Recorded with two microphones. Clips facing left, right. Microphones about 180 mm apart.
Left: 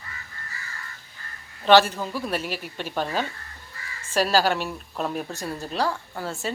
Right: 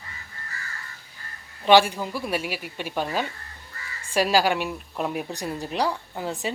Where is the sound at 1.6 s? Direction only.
10° right (ahead or behind).